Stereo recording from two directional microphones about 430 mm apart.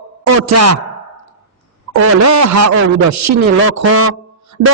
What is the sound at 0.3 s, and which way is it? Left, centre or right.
Speech, right.